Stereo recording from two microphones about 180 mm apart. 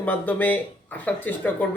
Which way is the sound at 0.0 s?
10° left (ahead or behind).